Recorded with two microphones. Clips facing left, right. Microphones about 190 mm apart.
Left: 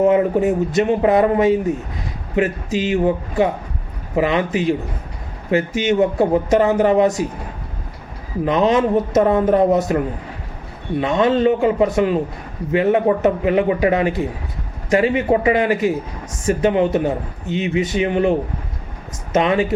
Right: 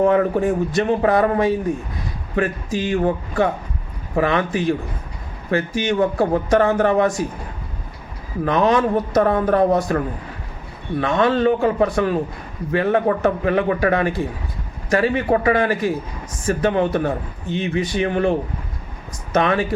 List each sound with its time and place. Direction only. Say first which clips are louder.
0.0 s a man's voice: left 2 dB; 20° left (ahead or behind)
8.4 s a man's voice: left 1 dB; 20° left (ahead or behind)
11.0 s a man's voice: left 2 dB; 20° left (ahead or behind)